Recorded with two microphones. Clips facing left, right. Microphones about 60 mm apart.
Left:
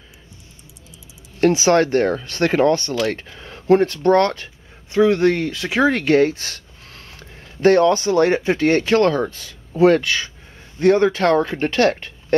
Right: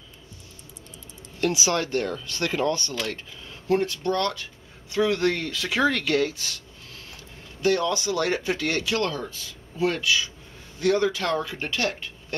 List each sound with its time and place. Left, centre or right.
1.4 s speech: left
4.9 s speech: left